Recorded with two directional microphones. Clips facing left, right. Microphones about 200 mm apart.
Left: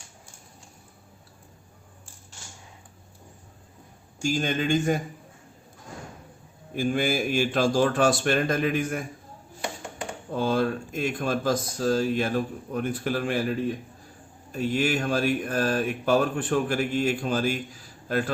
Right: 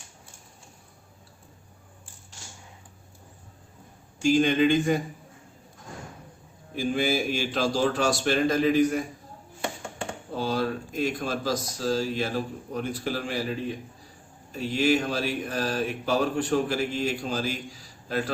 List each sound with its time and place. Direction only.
4.2 s speech: 45° left (ahead or behind)
6.7 s speech: 50° left (ahead or behind)
10.3 s speech: 50° left (ahead or behind)